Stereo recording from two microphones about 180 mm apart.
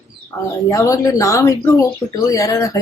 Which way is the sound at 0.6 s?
15° left (ahead or behind).